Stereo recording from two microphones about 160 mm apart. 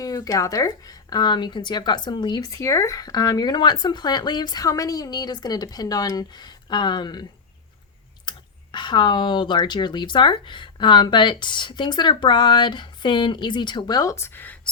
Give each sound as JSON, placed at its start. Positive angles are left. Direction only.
{"t": 0.0, "sound": "speech", "side_deg": 20}